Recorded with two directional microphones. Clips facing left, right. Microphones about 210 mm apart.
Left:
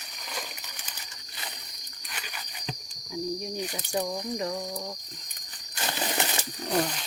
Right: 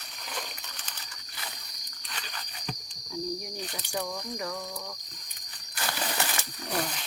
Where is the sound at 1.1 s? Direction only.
25° left (ahead or behind).